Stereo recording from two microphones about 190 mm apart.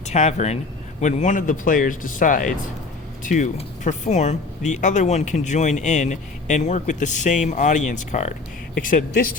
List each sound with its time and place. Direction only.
0.1 s speech: 35° left (ahead or behind)